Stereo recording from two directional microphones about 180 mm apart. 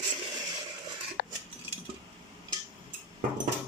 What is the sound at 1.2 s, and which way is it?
Cutlery, 55° left (ahead or behind).